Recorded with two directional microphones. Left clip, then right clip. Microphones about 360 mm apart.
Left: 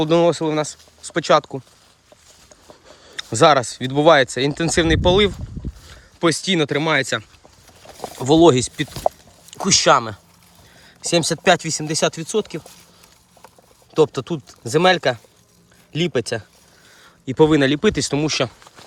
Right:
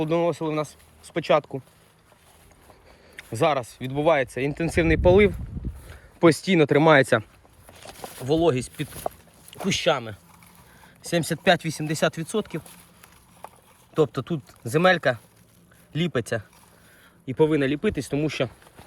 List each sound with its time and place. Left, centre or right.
0.0 s speech: centre
3.1 s a sound: centre
3.3 s speech: left
4.2 s speech: centre
8.2 s speech: centre
13.9 s speech: centre